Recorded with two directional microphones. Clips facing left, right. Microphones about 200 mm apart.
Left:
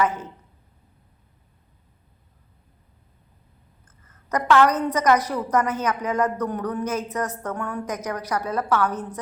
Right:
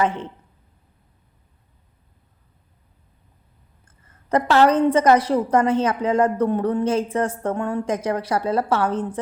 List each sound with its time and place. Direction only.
0.0 s a woman's voice: 25° right (ahead or behind)
3.8 s a woman's voice: 30° right (ahead or behind)